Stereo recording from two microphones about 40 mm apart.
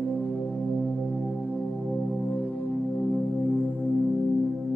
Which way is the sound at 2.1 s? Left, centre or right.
Left.